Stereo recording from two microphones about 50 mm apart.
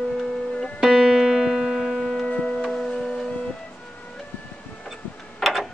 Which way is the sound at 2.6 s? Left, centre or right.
Centre.